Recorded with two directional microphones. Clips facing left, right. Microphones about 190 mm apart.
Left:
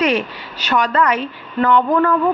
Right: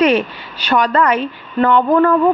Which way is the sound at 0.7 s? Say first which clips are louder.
Right 2 dB; 30° right (ahead or behind).